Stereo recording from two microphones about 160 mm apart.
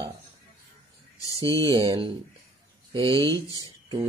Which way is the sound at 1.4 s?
25° right (ahead or behind).